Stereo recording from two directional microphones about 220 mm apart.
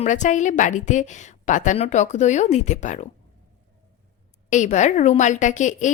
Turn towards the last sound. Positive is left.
turn(degrees=35)  # may be behind; listen again after turning